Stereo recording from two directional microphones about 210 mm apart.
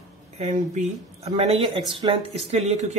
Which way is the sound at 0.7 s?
30° right (ahead or behind).